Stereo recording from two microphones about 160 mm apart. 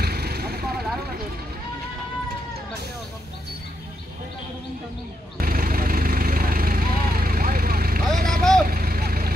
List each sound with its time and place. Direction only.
0.0 s vehicle: 75° right (ahead or behind)
5.4 s vehicle: 65° right (ahead or behind)